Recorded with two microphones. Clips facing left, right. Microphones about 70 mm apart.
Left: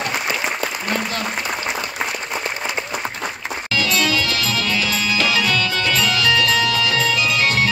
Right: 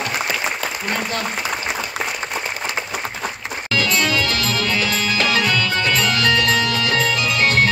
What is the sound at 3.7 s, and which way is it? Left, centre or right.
Music, right.